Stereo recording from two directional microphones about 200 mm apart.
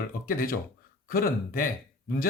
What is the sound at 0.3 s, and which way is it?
Speech, 45° left (ahead or behind).